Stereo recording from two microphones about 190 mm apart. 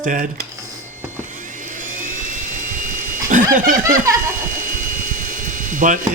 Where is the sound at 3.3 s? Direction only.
40° right (ahead or behind).